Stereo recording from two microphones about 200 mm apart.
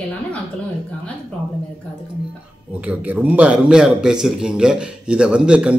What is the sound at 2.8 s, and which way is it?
A man's voice, 5° right (ahead or behind).